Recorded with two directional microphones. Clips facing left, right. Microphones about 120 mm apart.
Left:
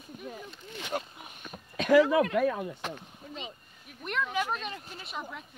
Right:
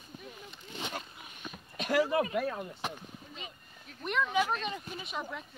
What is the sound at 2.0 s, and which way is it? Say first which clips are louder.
Speech: left 4 dB; 70° left (ahead or behind).